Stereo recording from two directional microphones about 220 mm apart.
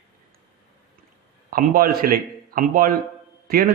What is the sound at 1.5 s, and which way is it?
A man's voice, 40° right (ahead or behind).